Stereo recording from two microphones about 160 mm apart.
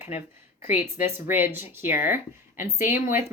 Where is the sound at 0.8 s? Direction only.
10° right (ahead or behind).